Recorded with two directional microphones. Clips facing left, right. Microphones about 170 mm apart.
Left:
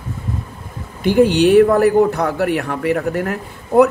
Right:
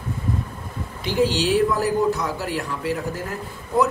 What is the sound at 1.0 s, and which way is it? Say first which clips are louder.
A man's voice: left 9 dB; 55° left (ahead or behind).